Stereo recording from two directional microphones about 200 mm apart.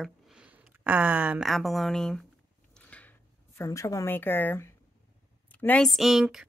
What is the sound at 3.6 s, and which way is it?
A woman's voice, 15° left (ahead or behind).